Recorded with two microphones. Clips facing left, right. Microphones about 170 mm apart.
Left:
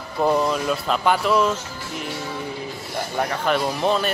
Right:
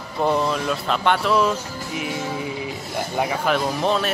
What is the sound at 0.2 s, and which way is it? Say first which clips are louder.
A man's voice: left 1 dB; centre (ahead or behind).